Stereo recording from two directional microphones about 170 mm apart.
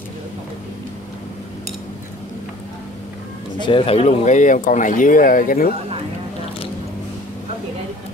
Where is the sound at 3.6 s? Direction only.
30° left (ahead or behind); by 5.6 s 55° left (ahead or behind).